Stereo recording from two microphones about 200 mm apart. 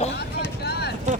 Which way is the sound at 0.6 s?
55° left (ahead or behind).